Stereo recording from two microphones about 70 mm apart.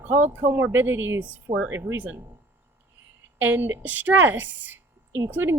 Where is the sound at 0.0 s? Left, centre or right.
Right.